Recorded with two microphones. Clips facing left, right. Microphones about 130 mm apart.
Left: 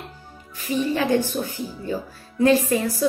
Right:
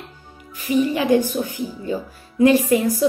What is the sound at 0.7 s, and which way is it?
A woman's voice, 15° right (ahead or behind).